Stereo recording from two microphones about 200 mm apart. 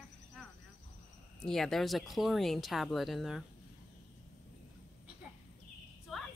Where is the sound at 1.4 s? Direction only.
Centre (ahead or behind).